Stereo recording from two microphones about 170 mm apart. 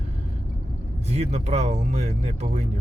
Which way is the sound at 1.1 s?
40° right (ahead or behind).